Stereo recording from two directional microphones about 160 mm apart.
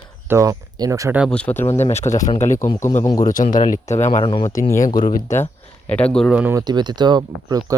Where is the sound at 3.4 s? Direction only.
55° left (ahead or behind).